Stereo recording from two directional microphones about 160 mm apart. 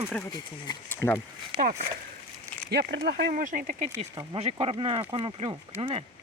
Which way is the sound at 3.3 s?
55° right (ahead or behind).